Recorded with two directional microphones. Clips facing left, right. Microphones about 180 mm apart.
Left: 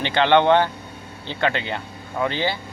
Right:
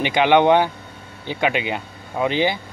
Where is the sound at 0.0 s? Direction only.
15° right (ahead or behind).